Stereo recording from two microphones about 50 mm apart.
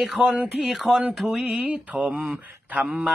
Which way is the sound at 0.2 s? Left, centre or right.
Right.